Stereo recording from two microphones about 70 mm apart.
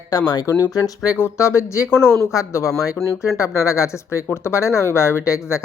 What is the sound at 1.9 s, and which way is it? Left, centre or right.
Speech, left.